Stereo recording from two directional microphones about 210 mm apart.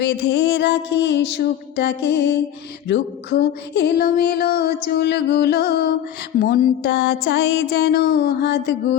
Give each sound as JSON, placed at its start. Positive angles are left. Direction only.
{"t": 0.0, "sound": "music", "side_deg": 55}